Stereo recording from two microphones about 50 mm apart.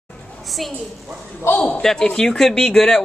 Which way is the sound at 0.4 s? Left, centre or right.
Centre.